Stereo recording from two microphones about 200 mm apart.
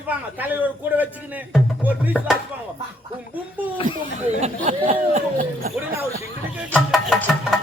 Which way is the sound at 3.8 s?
40° right (ahead or behind).